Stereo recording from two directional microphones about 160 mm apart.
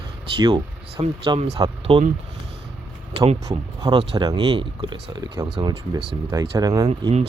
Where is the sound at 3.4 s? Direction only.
25° right (ahead or behind).